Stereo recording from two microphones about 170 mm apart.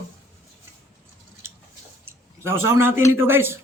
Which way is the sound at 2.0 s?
15° right (ahead or behind).